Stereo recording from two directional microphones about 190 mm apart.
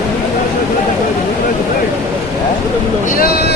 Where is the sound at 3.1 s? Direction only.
50° left (ahead or behind).